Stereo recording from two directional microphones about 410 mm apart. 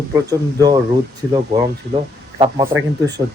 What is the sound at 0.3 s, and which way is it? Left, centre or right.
Speech, centre.